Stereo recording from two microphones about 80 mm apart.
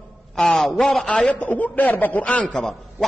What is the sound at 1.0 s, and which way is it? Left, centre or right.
A man's voice, centre.